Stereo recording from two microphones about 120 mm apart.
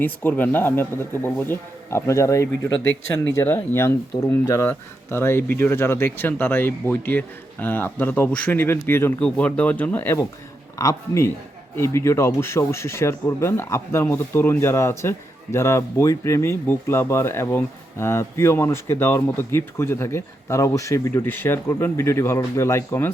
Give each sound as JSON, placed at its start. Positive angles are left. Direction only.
{"t": 0.0, "sound": "speech", "side_deg": 15}
{"t": 10.8, "sound": "speech", "side_deg": 25}